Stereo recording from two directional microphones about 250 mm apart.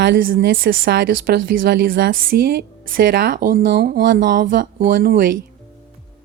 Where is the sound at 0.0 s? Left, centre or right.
Right.